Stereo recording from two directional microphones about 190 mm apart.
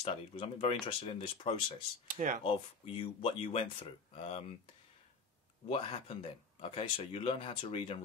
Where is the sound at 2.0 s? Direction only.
40° right (ahead or behind).